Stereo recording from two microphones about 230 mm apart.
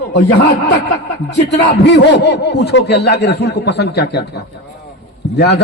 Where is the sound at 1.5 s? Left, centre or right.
Left.